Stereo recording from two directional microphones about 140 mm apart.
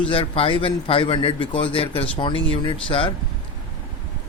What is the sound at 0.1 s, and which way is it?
A man's voice, 40° left (ahead or behind).